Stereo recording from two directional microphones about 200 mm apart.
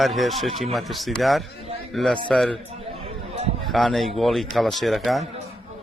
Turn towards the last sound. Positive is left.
turn(degrees=0)  # may be behind; listen again after turning